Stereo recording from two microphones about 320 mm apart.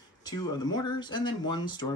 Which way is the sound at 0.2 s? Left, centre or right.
Centre.